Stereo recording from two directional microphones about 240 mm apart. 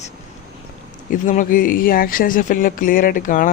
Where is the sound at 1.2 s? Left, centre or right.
Left.